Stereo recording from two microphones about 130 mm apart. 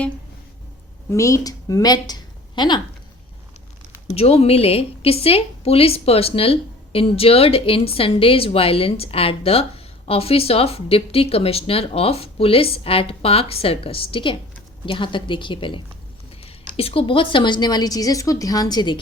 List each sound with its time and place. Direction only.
1.1 s a woman's voice: 25° left (ahead or behind)
4.1 s a woman's voice: 50° left (ahead or behind); by 18.9 s 30° left (ahead or behind)